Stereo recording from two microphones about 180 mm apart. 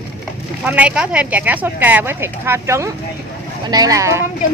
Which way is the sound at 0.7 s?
5° right (ahead or behind).